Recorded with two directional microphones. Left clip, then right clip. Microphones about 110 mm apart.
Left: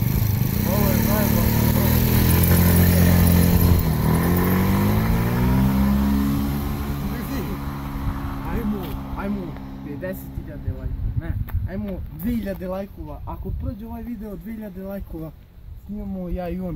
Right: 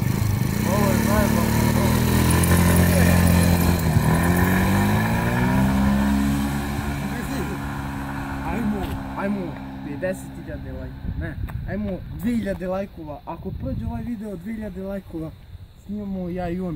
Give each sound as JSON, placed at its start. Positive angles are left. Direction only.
{"t": 0.0, "sound": "vehicle", "side_deg": 30}
{"t": 2.8, "sound": "vehicle", "side_deg": 0}
{"t": 7.0, "sound": "vehicle", "side_deg": -45}
{"t": 8.5, "sound": "a sound", "side_deg": -30}
{"t": 10.0, "sound": "vehicle", "side_deg": -10}
{"t": 11.7, "sound": "speech", "side_deg": -5}
{"t": 14.2, "sound": "speech", "side_deg": 0}
{"t": 16.3, "sound": "speech", "side_deg": 0}